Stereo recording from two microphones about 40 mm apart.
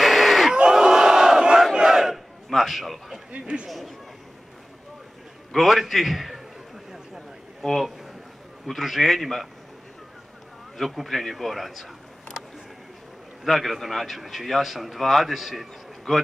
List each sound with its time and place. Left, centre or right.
0.0 s crowd: centre
0.6 s crowd: centre
1.6 s battle cry: centre
2.5 s a man's voice: centre
3.3 s a man's voice: right
3.6 s a man's voice: centre
5.5 s a man's voice: centre
7.6 s a man's voice: centre
10.8 s a man's voice: centre
13.4 s a man's voice: centre